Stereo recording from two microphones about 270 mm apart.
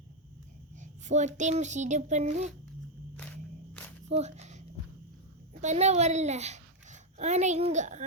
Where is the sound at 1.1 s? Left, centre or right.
Right.